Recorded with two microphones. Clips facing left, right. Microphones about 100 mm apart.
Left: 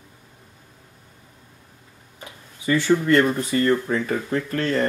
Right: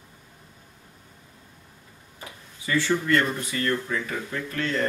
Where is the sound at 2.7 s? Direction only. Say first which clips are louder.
Left 5 dB; 20° left (ahead or behind).